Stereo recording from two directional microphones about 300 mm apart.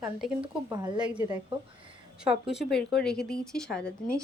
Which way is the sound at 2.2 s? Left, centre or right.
Centre.